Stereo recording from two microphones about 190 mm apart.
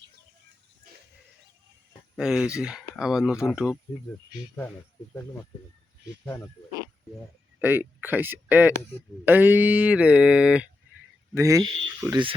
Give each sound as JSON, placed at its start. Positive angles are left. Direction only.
{"t": 2.1, "sound": "speech", "side_deg": -5}
{"t": 7.6, "sound": "speech", "side_deg": -10}
{"t": 11.3, "sound": "speech", "side_deg": -20}